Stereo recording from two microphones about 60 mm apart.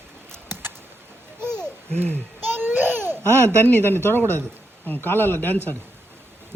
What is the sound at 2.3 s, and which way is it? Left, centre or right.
Babbling, right.